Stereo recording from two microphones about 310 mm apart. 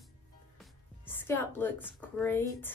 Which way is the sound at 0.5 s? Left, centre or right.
Centre.